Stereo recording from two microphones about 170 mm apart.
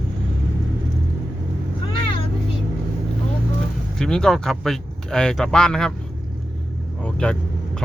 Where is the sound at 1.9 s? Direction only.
30° left (ahead or behind).